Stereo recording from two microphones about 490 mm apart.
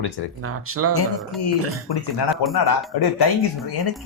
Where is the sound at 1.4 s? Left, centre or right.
Left.